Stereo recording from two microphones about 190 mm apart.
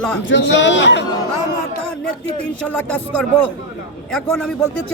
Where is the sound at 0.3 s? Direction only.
75° left (ahead or behind).